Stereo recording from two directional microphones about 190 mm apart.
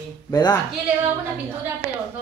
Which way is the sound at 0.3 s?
15° left (ahead or behind).